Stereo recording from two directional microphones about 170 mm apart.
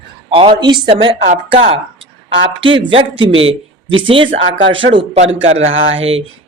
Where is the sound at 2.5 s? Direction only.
30° right (ahead or behind).